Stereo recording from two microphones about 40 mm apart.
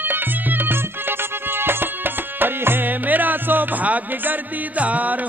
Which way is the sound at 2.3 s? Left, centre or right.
Right.